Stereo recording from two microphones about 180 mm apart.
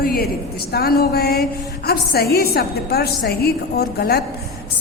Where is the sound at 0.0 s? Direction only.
60° left (ahead or behind).